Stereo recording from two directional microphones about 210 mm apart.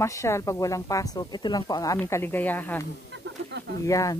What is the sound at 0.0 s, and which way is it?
Speech, 15° left (ahead or behind).